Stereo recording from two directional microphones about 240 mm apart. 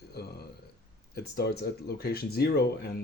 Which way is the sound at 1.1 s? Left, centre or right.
Left.